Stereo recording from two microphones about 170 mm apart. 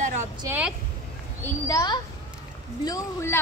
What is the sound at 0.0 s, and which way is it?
Vehicle, 45° right (ahead or behind).